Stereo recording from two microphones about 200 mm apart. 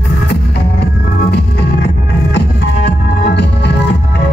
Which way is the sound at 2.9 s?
60° left (ahead or behind).